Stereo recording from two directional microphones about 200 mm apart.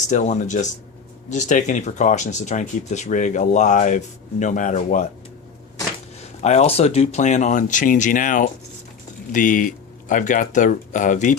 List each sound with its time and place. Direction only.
0.1 s speech: 35° left (ahead or behind)
6.4 s speech: 35° left (ahead or behind)